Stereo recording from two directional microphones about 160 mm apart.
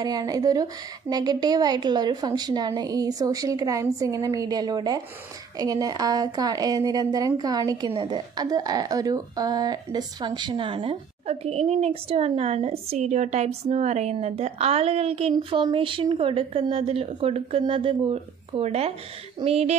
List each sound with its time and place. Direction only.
0.0 s a woman's voice: 25° right (ahead or behind); by 19.8 s 40° right (ahead or behind)